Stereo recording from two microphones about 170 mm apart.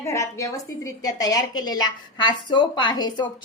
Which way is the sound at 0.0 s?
15° left (ahead or behind).